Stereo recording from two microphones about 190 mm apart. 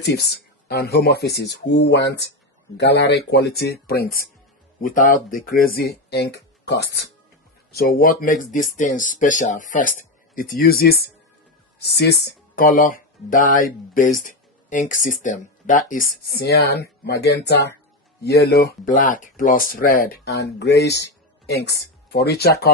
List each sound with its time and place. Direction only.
0.0 s speech: 60° left (ahead or behind)
7.7 s speech: 50° left (ahead or behind)